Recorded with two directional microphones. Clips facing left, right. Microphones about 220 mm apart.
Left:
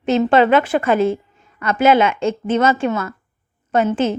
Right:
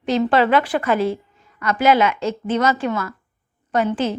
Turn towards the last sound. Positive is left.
turn(degrees=25)  # may be behind; listen again after turning